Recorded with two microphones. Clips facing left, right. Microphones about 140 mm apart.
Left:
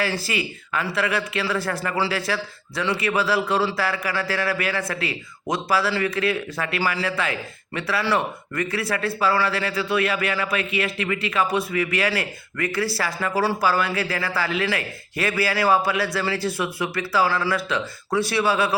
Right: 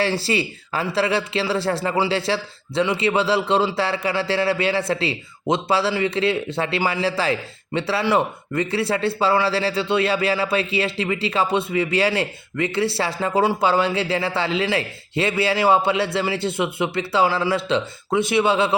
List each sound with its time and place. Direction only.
0.0 s a man's voice: 30° right (ahead or behind)